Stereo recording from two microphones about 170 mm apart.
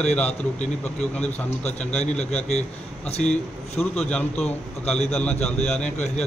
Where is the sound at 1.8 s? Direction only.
40° left (ahead or behind).